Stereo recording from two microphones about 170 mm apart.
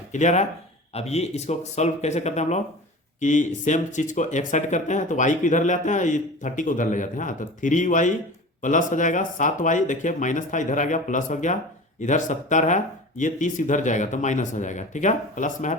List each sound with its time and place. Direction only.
0.1 s speech: 45° left (ahead or behind)